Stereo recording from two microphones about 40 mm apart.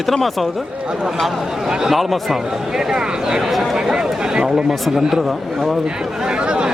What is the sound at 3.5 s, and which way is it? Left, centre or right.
Speech, centre.